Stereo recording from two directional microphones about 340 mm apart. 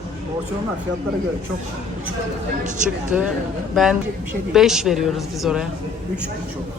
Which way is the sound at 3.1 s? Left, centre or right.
Centre.